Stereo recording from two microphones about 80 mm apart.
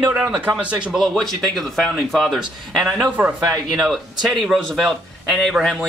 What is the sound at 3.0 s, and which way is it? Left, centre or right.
Speech, right.